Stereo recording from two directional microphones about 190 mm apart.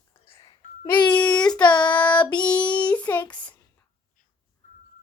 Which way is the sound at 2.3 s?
20° left (ahead or behind).